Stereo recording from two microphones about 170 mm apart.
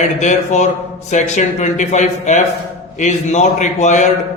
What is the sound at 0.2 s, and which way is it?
A man's voice, 45° left (ahead or behind).